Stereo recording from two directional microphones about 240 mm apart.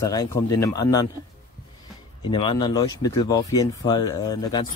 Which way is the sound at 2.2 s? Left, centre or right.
Centre.